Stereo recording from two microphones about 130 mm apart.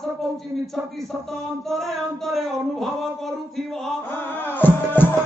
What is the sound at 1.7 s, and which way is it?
Speech, centre (ahead or behind).